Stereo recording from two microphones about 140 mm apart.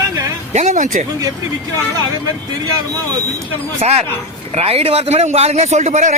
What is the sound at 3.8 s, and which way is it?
Speech, 55° right (ahead or behind).